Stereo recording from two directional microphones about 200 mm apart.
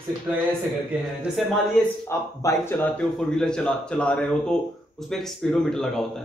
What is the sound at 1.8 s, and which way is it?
A man's voice, 5° left (ahead or behind).